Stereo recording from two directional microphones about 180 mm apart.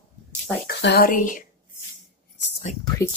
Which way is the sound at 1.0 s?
50° left (ahead or behind).